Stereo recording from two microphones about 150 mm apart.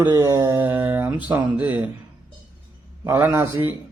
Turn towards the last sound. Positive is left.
turn(degrees=-15)  # may be behind; listen again after turning